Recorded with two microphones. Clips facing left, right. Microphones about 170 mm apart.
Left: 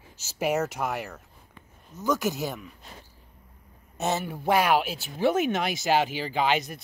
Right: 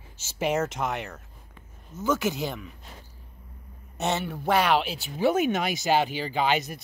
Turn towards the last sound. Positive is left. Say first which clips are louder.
# even
turn(degrees=0)  # may be behind; listen again after turning